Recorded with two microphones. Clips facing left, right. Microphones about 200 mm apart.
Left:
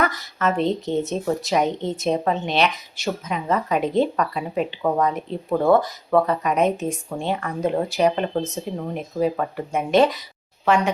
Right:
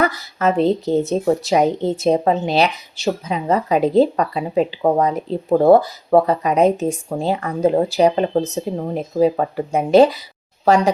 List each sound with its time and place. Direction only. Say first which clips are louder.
0.0 s speech: right 4 dB; 35° right (ahead or behind)